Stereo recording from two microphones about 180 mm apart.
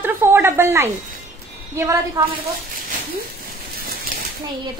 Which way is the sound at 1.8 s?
20° right (ahead or behind).